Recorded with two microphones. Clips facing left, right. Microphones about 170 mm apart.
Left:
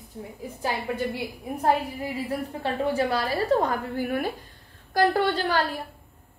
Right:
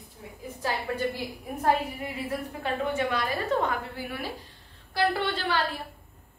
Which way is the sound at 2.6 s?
35° left (ahead or behind).